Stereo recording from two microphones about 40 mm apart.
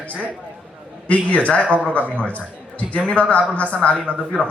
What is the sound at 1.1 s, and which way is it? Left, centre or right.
A man's voice, left.